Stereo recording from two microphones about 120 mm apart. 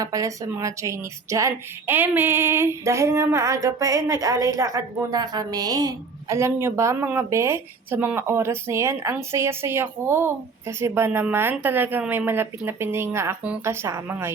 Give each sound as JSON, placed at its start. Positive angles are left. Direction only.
{"t": 0.0, "sound": "a woman's voice", "side_deg": -30}